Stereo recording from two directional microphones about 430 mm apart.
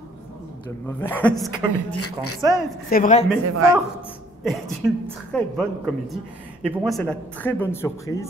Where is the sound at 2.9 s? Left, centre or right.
Centre.